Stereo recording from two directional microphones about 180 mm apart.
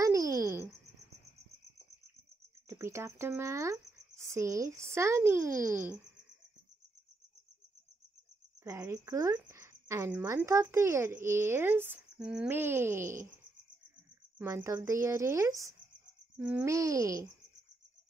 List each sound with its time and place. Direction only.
0.3 s a sound: 15° right (ahead or behind)
2.7 s speech: 15° right (ahead or behind)
8.6 s speech: 15° right (ahead or behind)
14.4 s speech: 15° right (ahead or behind)
16.3 s speech: 5° right (ahead or behind)
16.7 s speech: 20° right (ahead or behind)